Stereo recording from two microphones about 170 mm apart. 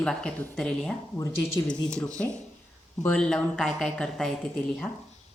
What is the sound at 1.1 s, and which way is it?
Speech, 15° left (ahead or behind).